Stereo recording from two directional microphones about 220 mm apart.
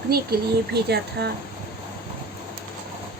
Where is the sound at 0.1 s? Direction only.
45° right (ahead or behind).